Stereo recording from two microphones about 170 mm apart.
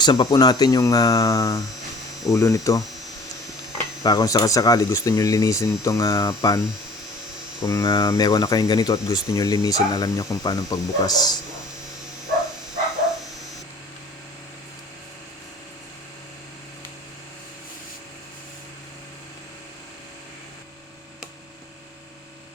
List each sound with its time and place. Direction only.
0.0 s speech: 25° left (ahead or behind)
4.0 s speech: 20° left (ahead or behind)
7.6 s speech: 20° left (ahead or behind)